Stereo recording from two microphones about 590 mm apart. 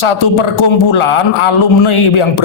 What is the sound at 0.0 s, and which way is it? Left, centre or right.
A man's voice, left.